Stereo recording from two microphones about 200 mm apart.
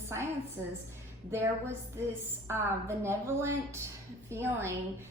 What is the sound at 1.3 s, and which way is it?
A woman's voice, 10° right (ahead or behind).